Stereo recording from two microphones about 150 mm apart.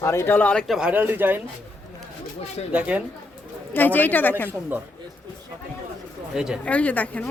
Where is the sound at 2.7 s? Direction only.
10° right (ahead or behind).